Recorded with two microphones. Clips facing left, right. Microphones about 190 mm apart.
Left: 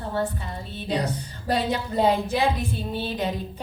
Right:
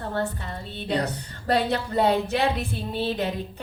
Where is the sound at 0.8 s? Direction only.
60° right (ahead or behind).